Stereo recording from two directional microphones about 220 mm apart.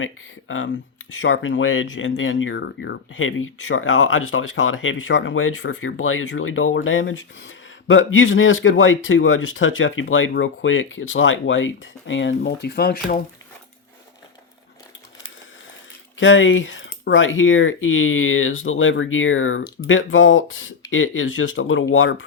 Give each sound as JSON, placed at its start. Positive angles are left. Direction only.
{"t": 0.0, "sound": "speech", "side_deg": 65}
{"t": 16.1, "sound": "speech", "side_deg": 60}